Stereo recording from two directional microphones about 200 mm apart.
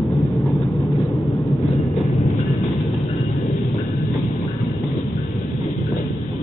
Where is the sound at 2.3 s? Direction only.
Centre (ahead or behind).